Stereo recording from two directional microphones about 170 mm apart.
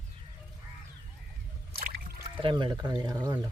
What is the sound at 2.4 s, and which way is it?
Speech, 30° right (ahead or behind).